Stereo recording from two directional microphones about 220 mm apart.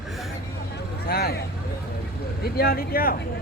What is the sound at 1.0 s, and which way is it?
Speech, 45° left (ahead or behind).